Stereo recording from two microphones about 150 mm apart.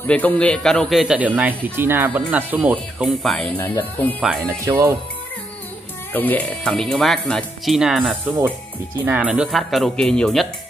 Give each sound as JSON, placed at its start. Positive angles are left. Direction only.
{"t": 0.0, "sound": "speech", "side_deg": 10}
{"t": 3.2, "sound": "speech", "side_deg": 5}
{"t": 4.6, "sound": "speech", "side_deg": -20}
{"t": 6.1, "sound": "speech", "side_deg": 10}